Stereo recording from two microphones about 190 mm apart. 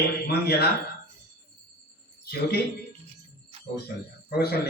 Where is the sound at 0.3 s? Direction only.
55° left (ahead or behind).